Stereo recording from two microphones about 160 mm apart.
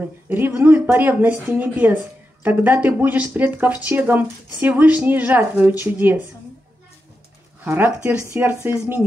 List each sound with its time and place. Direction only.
0.3 s speech: 10° right (ahead or behind)
7.6 s speech: 10° right (ahead or behind)